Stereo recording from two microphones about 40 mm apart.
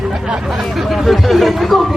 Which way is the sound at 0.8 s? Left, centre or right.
Centre.